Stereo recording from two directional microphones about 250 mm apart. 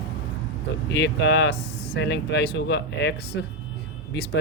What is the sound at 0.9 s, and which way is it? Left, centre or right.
Speech, left.